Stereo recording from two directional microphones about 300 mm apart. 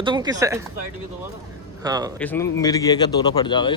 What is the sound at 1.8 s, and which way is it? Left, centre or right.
Speech, centre.